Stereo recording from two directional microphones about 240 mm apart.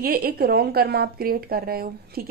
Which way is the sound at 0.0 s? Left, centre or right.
Right.